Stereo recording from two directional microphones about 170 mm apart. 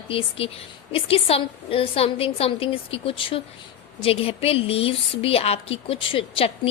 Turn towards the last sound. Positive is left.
turn(degrees=30)  # may be behind; listen again after turning